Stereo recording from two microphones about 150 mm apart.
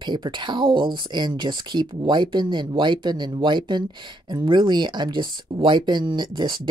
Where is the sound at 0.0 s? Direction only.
30° right (ahead or behind).